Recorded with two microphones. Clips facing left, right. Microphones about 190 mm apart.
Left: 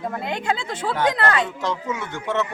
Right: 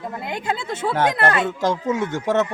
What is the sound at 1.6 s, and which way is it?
Speech, 45° right (ahead or behind).